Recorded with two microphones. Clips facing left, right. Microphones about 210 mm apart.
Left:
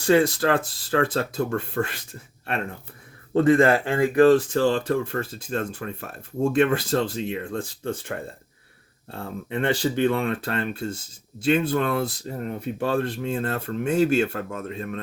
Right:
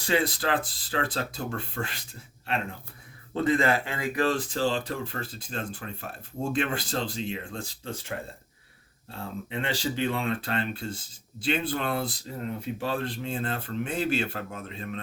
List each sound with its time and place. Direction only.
0.0 s speech: 50° left (ahead or behind)
3.3 s speech: 50° left (ahead or behind)
9.1 s speech: 55° left (ahead or behind)